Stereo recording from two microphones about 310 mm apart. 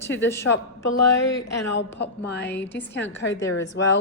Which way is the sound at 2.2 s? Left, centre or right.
Left.